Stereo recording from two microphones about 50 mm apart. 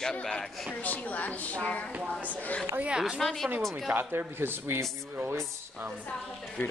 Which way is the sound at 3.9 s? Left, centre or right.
Right.